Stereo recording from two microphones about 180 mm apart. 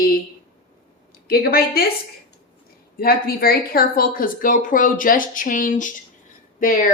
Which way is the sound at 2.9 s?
55° left (ahead or behind).